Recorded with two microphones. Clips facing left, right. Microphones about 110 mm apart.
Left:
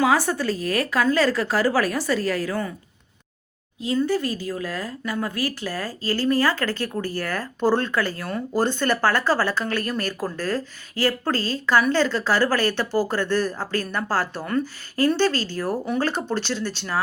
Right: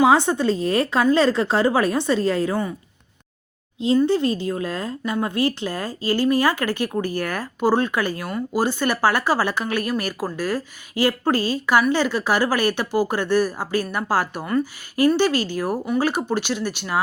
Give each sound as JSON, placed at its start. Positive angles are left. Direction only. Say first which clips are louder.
{"t": 0.0, "sound": "a woman's voice", "louder": "right 4 dB", "side_deg": -25}
{"t": 3.8, "sound": "speech", "louder": "right 5 dB", "side_deg": -25}